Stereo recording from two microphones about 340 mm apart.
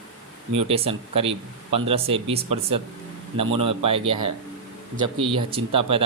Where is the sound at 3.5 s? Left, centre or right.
Centre.